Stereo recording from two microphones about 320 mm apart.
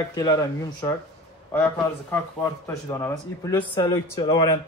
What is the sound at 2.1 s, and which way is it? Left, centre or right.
Speech, centre.